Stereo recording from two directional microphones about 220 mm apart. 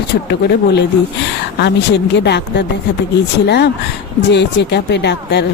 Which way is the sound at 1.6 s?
50° left (ahead or behind).